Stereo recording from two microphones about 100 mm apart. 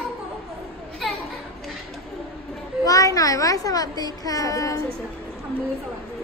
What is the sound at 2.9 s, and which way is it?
A child's voice, 35° left (ahead or behind).